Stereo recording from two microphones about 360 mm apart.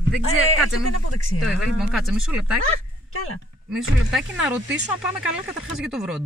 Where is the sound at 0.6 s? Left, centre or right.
Left.